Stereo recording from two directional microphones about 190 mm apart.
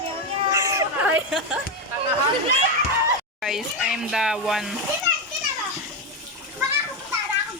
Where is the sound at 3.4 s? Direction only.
Centre (ahead or behind).